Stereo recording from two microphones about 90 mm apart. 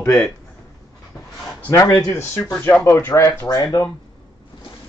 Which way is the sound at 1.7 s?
40° left (ahead or behind).